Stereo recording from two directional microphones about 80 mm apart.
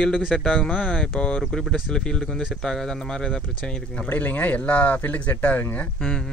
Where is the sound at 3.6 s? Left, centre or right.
Left.